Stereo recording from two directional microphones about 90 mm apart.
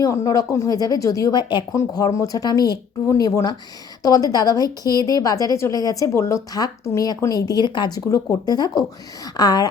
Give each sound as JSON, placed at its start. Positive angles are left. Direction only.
{"t": 0.0, "sound": "speech", "side_deg": 40}
{"t": 1.7, "sound": "a woman's voice", "side_deg": 45}